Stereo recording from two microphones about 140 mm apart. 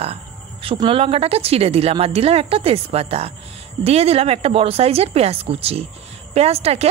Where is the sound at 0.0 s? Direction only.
45° right (ahead or behind).